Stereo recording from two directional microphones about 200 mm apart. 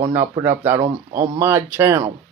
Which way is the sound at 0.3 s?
10° right (ahead or behind).